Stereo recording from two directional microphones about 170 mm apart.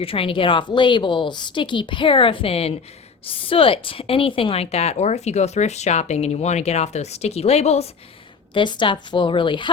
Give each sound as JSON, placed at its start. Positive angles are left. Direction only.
{"t": 0.0, "sound": "a woman's voice", "side_deg": 35}
{"t": 8.5, "sound": "a woman's voice", "side_deg": 30}